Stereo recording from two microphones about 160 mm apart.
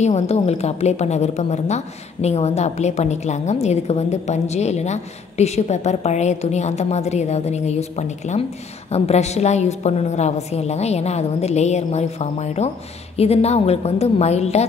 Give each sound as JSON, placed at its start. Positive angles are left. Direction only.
{"t": 0.0, "sound": "a woman's voice", "side_deg": 45}